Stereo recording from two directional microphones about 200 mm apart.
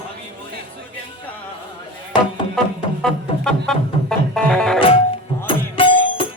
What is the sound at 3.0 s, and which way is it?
Music, 5° left (ahead or behind).